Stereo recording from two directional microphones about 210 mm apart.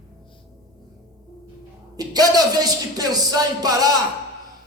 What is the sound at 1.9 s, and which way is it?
A man's voice, 20° right (ahead or behind).